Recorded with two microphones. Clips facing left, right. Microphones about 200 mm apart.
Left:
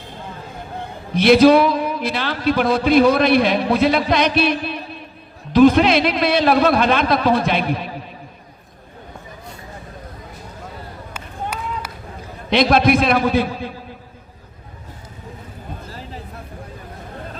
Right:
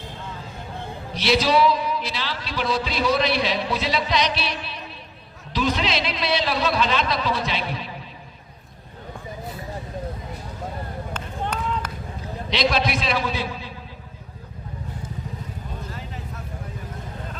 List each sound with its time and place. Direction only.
1.1 s a man's voice: 55° left (ahead or behind)
11.1 s run: 10° left (ahead or behind)
12.5 s a man's voice: 55° left (ahead or behind)
15.9 s vehicle: 35° left (ahead or behind)